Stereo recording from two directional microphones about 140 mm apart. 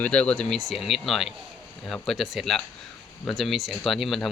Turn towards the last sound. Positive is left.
turn(degrees=0)  # may be behind; listen again after turning